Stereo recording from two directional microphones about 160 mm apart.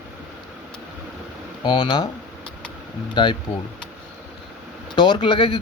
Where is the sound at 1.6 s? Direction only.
30° left (ahead or behind).